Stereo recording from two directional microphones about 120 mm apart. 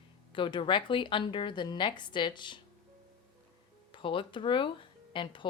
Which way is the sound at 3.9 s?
45° left (ahead or behind).